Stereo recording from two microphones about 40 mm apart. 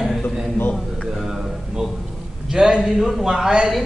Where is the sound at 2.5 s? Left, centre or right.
Centre.